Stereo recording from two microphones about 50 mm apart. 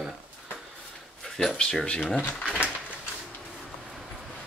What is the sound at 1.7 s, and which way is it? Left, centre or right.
Speech, centre.